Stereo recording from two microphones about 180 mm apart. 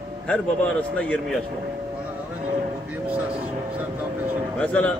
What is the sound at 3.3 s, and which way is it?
Vehicle, 10° right (ahead or behind).